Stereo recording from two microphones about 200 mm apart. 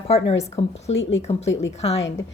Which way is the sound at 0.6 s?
25° left (ahead or behind).